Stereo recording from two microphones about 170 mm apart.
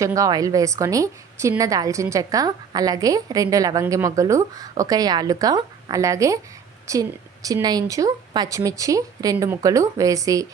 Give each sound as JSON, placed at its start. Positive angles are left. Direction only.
{"t": 0.0, "sound": "a woman's voice", "side_deg": -20}